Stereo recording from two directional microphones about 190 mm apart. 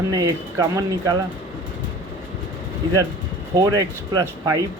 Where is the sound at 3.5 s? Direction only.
20° right (ahead or behind).